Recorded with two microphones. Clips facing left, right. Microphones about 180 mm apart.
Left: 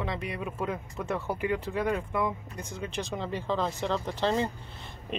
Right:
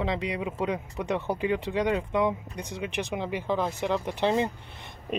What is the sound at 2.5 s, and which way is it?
Speech, 70° right (ahead or behind).